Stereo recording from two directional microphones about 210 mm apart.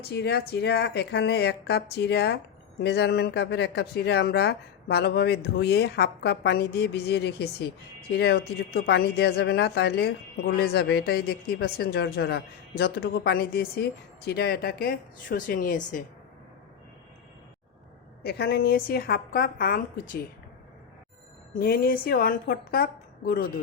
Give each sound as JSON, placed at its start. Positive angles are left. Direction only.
{"t": 0.1, "sound": "speech", "side_deg": 50}
{"t": 18.2, "sound": "speech", "side_deg": 50}
{"t": 21.6, "sound": "speech", "side_deg": 45}